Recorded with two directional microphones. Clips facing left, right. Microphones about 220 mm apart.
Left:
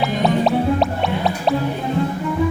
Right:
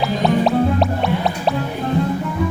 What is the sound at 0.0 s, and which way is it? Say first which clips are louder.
Music: right 1 dB; centre (ahead or behind).